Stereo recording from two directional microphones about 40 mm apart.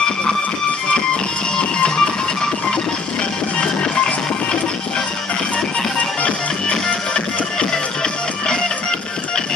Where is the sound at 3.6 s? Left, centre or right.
Left.